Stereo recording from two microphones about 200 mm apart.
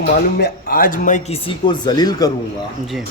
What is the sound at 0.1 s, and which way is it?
A man's voice, 50° left (ahead or behind).